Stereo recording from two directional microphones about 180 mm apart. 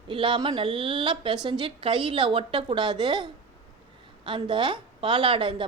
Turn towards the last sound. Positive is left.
turn(degrees=-30)  # may be behind; listen again after turning